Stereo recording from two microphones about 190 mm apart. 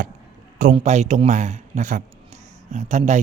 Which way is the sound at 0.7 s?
35° right (ahead or behind).